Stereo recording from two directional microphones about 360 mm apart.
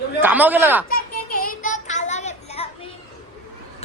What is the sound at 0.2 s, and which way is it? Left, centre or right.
Speech, centre.